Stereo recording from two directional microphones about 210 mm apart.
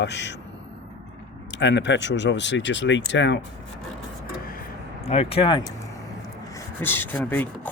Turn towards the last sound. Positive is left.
turn(degrees=10)  # may be behind; listen again after turning